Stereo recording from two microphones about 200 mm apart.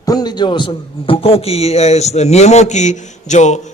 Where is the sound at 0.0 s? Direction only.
20° left (ahead or behind).